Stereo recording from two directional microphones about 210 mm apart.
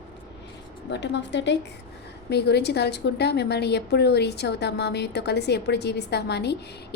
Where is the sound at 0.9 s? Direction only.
55° left (ahead or behind).